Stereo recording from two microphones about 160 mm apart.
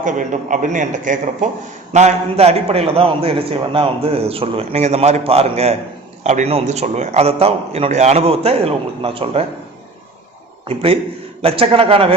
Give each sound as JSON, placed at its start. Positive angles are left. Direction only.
{"t": 0.0, "sound": "a man's voice", "side_deg": -55}
{"t": 11.4, "sound": "a man's voice", "side_deg": -35}